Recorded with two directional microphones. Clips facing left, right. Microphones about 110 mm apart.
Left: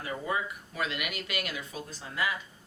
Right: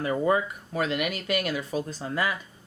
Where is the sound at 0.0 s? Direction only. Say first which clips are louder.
Right 9 dB; 45° right (ahead or behind).